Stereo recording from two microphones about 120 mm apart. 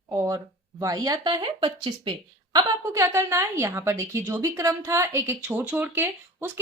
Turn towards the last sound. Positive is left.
turn(degrees=-15)  # may be behind; listen again after turning